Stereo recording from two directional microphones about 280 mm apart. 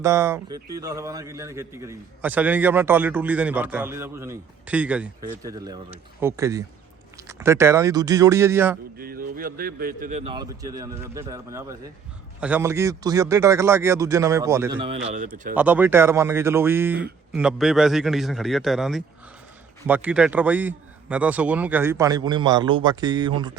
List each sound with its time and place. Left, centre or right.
0.0 s a man's voice: centre
9.0 s a man's voice: right
15.1 s a man's voice: right
15.5 s a man's voice: centre